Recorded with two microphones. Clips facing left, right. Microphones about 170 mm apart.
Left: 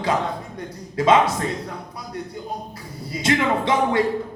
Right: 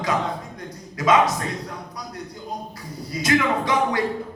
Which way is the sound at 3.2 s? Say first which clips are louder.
Even; 25° left (ahead or behind).